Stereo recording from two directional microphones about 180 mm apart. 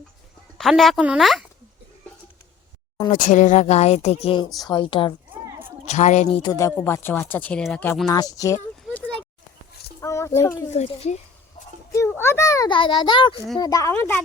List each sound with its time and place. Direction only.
0.6 s a woman's voice: centre (ahead or behind)
3.1 s a child's voice: 45° left (ahead or behind); by 5.1 s 25° left (ahead or behind)
5.3 s a sound: 10° right (ahead or behind)
5.8 s speech: 40° left (ahead or behind)
6.4 s speech: 20° left (ahead or behind)
10.0 s a sound: 15° left (ahead or behind)
10.7 s speech: 40° left (ahead or behind)
11.9 s a child's voice: 15° left (ahead or behind)